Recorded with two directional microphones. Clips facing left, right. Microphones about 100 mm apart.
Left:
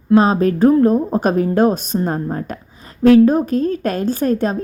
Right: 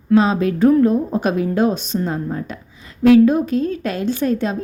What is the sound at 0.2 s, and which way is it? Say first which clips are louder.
A woman's voice: left 2 dB; 40° left (ahead or behind).